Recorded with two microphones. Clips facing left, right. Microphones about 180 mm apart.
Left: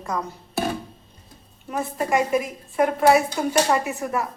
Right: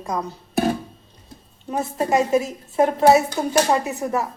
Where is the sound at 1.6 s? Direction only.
25° right (ahead or behind).